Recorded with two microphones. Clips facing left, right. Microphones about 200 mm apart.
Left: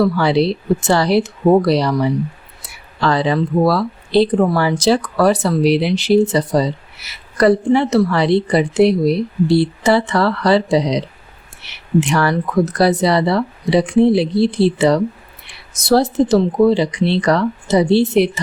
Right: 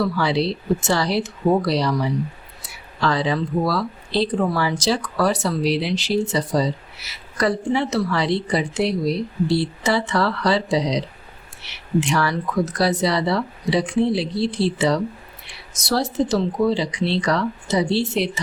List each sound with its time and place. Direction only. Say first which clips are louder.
0.0 s speech: left 6 dB; 60° left (ahead or behind)